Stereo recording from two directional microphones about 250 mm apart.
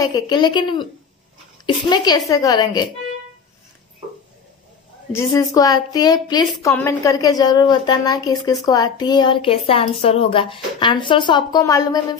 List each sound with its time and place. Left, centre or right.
0.0 s a woman's voice: centre
5.1 s a woman's voice: centre